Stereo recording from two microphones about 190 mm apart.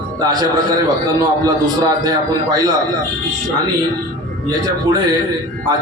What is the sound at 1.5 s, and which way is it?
A man's voice, 20° right (ahead or behind).